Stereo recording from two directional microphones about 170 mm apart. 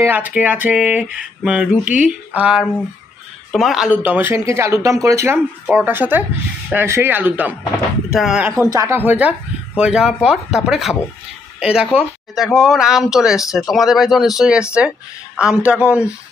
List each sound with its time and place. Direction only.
0.0 s a woman's voice: 10° right (ahead or behind)
8.5 s a woman's voice: 15° right (ahead or behind)